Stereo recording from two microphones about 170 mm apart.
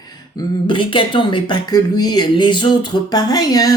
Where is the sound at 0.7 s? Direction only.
30° left (ahead or behind).